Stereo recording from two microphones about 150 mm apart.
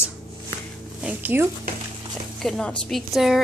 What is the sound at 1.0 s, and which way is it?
Speech, 10° right (ahead or behind).